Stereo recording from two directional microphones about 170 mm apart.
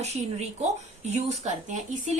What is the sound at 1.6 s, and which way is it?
Speech, 45° right (ahead or behind).